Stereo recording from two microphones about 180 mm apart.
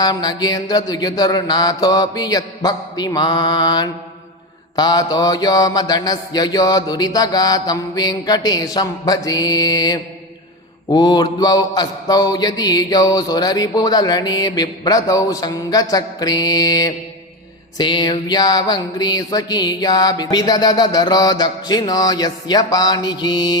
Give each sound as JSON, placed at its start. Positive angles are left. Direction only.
{"t": 0.0, "sound": "mantra", "side_deg": 25}